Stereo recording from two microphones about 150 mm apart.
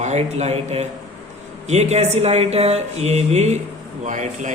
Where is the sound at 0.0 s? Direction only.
50° right (ahead or behind).